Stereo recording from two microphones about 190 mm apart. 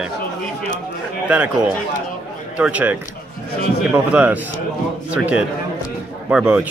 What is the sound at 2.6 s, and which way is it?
A man's voice, 5° right (ahead or behind).